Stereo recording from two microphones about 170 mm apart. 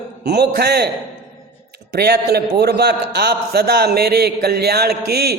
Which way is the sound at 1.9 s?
70° right (ahead or behind).